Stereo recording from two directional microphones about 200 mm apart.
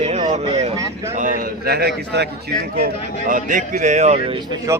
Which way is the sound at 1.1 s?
40° right (ahead or behind).